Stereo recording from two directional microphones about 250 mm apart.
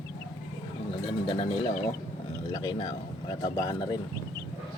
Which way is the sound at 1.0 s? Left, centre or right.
Left.